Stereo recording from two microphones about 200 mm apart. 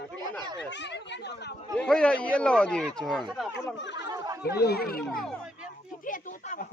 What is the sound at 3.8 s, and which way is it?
Speech, 60° left (ahead or behind).